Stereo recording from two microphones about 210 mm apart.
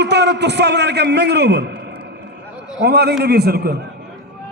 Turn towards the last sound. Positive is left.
turn(degrees=-45)  # may be behind; listen again after turning